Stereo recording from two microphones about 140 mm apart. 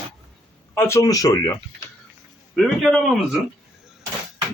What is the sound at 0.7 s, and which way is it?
Speech, 20° left (ahead or behind).